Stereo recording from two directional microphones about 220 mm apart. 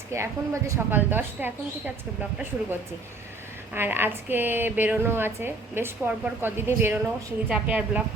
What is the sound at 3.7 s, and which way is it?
Speech, 10° right (ahead or behind).